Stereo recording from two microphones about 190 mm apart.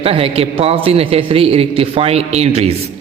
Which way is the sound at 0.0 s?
30° right (ahead or behind).